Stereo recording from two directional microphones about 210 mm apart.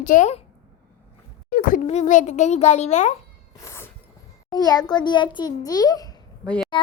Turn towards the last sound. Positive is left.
turn(degrees=20)  # may be behind; listen again after turning